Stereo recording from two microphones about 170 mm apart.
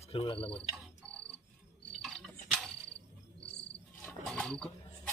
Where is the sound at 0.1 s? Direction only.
30° left (ahead or behind).